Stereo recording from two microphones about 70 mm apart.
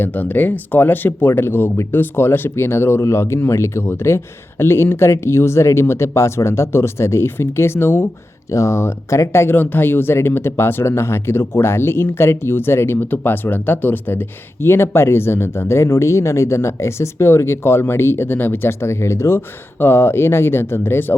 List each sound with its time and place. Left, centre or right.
0.0 s speech: left
8.4 s speech: left